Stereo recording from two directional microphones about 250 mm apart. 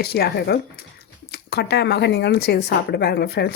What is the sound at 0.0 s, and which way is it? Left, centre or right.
Speech, left.